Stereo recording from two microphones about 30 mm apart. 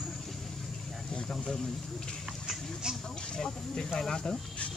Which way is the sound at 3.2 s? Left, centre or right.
Left.